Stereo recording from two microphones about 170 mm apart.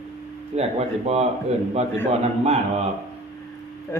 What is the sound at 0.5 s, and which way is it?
Speech, 40° right (ahead or behind).